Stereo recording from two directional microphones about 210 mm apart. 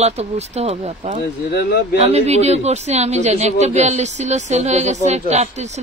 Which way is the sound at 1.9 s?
30° right (ahead or behind).